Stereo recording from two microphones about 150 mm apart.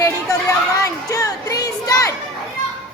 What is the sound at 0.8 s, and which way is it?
Speech, 25° left (ahead or behind).